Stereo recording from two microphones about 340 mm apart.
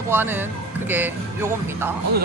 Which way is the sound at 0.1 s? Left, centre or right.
Centre.